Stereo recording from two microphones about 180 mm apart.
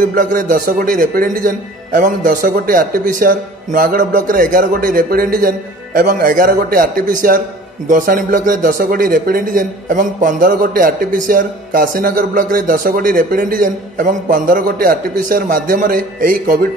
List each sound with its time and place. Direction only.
0.0 s a man's voice: 50° right (ahead or behind)